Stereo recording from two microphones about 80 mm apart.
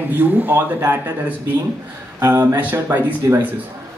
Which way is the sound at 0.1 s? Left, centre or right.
Right.